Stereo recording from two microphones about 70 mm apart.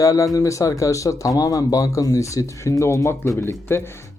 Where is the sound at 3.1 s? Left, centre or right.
Left.